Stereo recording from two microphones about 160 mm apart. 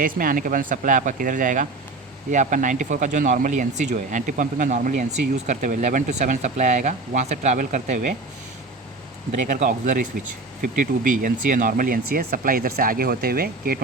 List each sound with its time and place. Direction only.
0.0 s speech: 60° right (ahead or behind)
9.3 s speech: 50° right (ahead or behind); by 13.7 s 70° right (ahead or behind)